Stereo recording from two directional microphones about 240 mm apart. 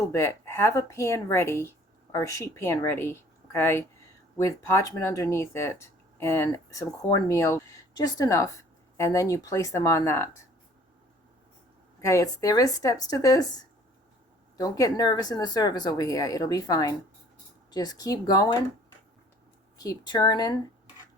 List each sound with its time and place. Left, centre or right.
0.1 s speech: centre
12.0 s speech: centre
19.8 s speech: centre